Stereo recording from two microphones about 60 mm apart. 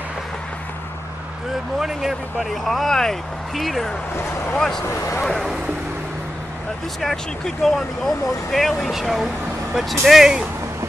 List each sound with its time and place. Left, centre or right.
1.8 s speech: centre
4.8 s speech: left
7.0 s speech: centre